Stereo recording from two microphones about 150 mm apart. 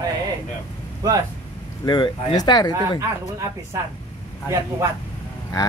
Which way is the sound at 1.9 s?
30° left (ahead or behind).